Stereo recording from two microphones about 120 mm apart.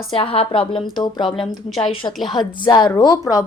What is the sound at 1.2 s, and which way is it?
Speech, centre (ahead or behind).